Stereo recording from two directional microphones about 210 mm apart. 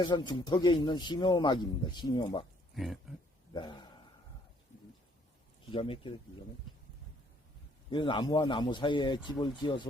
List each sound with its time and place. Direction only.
0.0 s speech: 20° left (ahead or behind)
2.7 s speech: centre (ahead or behind)
3.5 s a man's voice: 20° left (ahead or behind)
5.7 s speech: 25° left (ahead or behind)
7.9 s speech: 25° left (ahead or behind)